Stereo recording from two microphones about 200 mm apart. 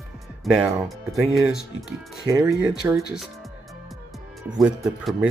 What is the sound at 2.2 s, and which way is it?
Speech, 15° right (ahead or behind).